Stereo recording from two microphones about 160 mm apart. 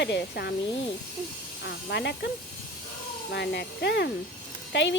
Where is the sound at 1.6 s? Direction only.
90° left.